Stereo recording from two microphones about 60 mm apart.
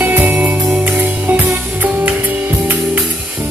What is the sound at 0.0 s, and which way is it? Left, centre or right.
Music, right.